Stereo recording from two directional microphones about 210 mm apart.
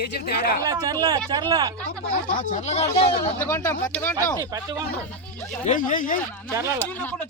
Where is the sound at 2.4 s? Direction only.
35° left (ahead or behind).